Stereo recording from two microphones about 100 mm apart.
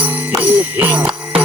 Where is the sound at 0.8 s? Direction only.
15° right (ahead or behind).